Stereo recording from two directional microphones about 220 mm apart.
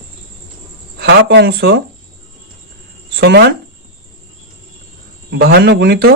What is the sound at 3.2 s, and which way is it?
Speech, 50° right (ahead or behind).